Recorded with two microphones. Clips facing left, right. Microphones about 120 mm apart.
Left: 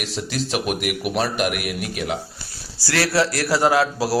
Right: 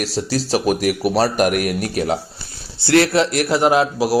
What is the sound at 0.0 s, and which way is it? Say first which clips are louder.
Speech: right 5 dB; 35° right (ahead or behind).